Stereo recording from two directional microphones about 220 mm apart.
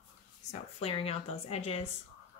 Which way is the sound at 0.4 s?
30° left (ahead or behind).